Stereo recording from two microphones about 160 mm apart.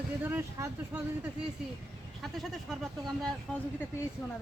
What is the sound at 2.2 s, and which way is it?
Speech, centre (ahead or behind).